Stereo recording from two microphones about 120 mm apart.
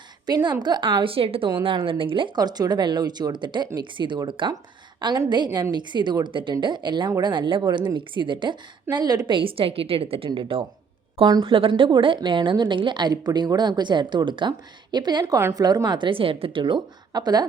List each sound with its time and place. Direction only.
0.3 s a woman's voice: 35° right (ahead or behind)